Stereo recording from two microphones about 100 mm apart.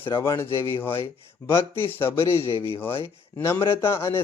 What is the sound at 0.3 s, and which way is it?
Speech, 25° left (ahead or behind).